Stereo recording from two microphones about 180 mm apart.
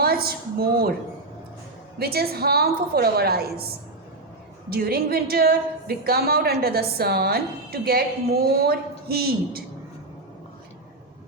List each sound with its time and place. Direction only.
0.0 s speech: 60° right (ahead or behind)
2.0 s a woman's voice: 60° right (ahead or behind)
4.7 s a woman's voice: 60° right (ahead or behind)